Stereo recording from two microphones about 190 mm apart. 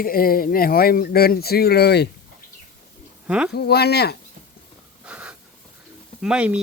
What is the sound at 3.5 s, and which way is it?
Speech, 60° left (ahead or behind).